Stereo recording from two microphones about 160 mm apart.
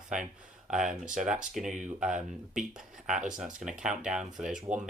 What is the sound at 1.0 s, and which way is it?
Speech, 55° right (ahead or behind).